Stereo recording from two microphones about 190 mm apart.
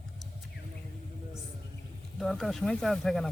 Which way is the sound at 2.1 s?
Centre (ahead or behind).